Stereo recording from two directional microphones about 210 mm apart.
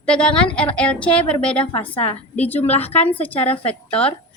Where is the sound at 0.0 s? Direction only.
5° left (ahead or behind).